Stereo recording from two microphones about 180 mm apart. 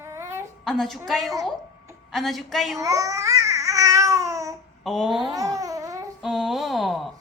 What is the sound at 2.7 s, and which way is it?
Babbling, 20° right (ahead or behind).